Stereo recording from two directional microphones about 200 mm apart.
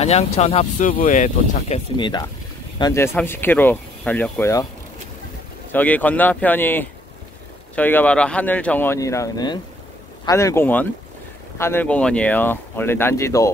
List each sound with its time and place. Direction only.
0.0 s speech: 30° left (ahead or behind)
0.8 s speech: 40° left (ahead or behind)
2.0 s speech: 20° left (ahead or behind)
5.7 s speech: 10° left (ahead or behind)